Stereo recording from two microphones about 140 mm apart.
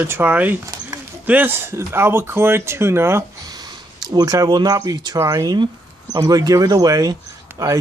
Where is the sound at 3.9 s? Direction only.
30° right (ahead or behind).